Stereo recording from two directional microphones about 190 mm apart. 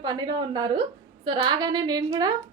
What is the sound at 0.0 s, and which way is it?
A woman's voice, 25° right (ahead or behind).